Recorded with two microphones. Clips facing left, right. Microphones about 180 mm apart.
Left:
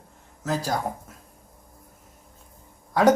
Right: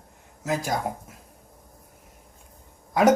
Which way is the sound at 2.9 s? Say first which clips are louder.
Even; 20° right (ahead or behind).